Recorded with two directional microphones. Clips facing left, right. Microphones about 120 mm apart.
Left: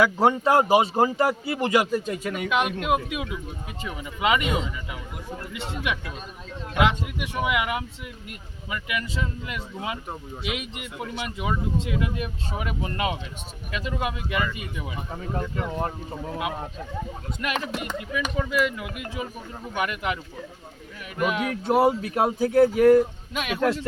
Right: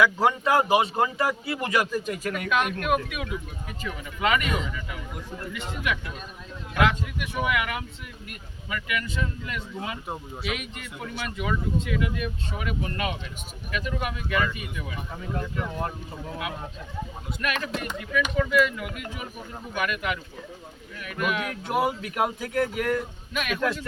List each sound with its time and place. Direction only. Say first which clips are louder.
0.0 s a man's voice: left 2 dB; 30° left (ahead or behind)
17.4 s a man's voice: left 1 dB; 20° left (ahead or behind)
21.2 s a man's voice: left 3 dB; 25° left (ahead or behind)